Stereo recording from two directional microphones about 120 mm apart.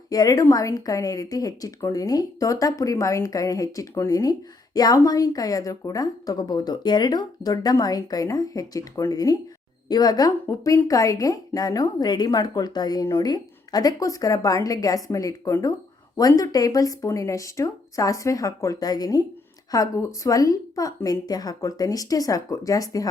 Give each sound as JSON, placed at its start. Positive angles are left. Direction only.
{"t": 0.1, "sound": "a woman's voice", "side_deg": 30}